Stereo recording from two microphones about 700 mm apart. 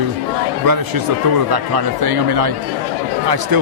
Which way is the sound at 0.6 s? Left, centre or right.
Right.